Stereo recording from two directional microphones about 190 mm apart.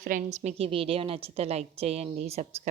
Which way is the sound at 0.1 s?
40° right (ahead or behind).